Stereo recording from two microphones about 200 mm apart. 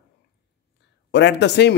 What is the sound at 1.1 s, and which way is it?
Speech, 60° left (ahead or behind).